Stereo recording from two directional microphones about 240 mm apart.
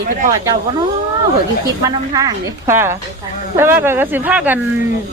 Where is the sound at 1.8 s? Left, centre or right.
Centre.